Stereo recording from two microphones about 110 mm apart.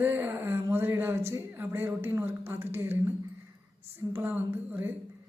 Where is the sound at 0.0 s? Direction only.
20° right (ahead or behind).